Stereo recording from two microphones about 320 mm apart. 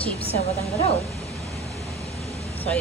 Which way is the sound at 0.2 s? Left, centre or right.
Centre.